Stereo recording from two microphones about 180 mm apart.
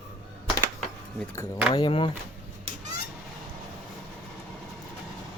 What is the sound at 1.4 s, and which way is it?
Speech, 20° left (ahead or behind).